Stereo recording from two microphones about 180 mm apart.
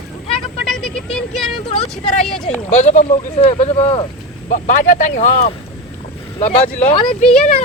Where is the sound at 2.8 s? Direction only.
40° left (ahead or behind).